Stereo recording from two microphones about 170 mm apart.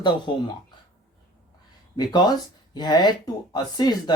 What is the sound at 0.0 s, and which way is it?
Speech, 25° left (ahead or behind).